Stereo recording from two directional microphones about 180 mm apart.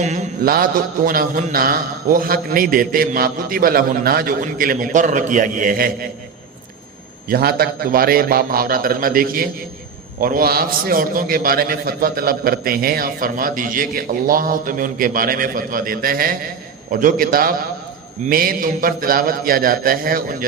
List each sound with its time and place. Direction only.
0.0 s a man's voice: 40° right (ahead or behind)
7.3 s a man's voice: 55° right (ahead or behind)